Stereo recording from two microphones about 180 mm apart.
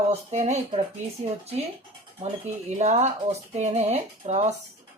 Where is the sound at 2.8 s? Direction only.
40° right (ahead or behind).